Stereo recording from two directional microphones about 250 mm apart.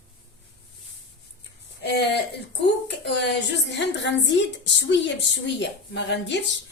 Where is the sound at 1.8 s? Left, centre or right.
Left.